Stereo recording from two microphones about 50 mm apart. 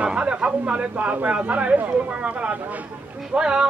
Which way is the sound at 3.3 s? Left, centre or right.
Centre.